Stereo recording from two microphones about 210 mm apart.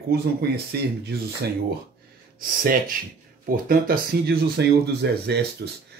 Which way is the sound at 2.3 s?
40° right (ahead or behind).